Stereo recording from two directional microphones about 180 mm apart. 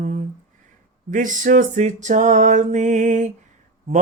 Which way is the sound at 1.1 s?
45° right (ahead or behind).